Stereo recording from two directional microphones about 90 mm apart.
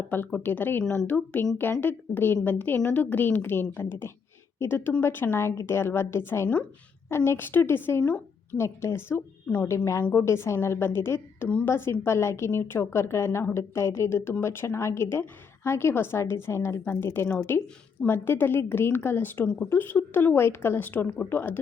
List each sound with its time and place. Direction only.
0.1 s a woman's voice: 20° left (ahead or behind)
9.6 s a woman's voice: 35° left (ahead or behind)